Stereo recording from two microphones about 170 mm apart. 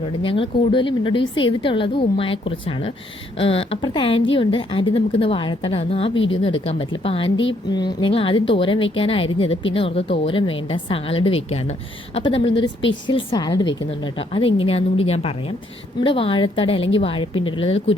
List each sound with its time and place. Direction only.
0.2 s speech: 30° left (ahead or behind)